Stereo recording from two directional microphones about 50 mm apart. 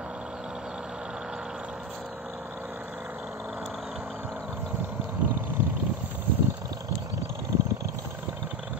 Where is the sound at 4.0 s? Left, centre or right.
Right.